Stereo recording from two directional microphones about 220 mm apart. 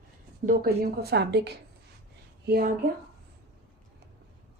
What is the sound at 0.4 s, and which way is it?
A woman's voice, 45° right (ahead or behind).